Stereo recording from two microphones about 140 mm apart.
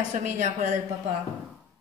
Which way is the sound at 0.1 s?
60° right (ahead or behind).